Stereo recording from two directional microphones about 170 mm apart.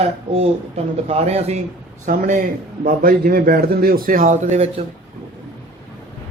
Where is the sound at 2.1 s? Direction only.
50° right (ahead or behind).